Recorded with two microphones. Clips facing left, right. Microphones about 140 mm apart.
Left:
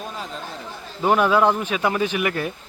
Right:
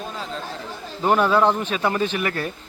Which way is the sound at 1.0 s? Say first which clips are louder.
Even; 5° left (ahead or behind).